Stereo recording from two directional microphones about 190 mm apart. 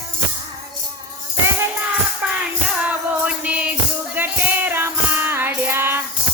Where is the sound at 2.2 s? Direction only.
10° right (ahead or behind).